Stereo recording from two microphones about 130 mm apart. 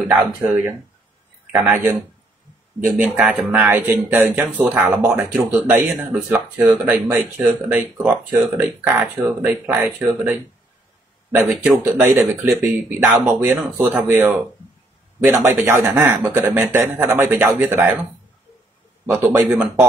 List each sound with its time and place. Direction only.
0.1 s speech: 15° right (ahead or behind)
3.0 s speech: 5° right (ahead or behind)
3.5 s speech: 15° right (ahead or behind)
11.3 s speech: 10° right (ahead or behind)
15.2 s speech: 20° right (ahead or behind)
19.0 s speech: 20° right (ahead or behind)